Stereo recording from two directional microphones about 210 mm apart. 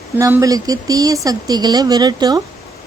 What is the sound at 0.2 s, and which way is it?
Speech, 15° right (ahead or behind).